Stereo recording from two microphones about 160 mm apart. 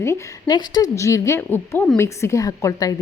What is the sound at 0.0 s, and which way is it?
Speech, 20° left (ahead or behind).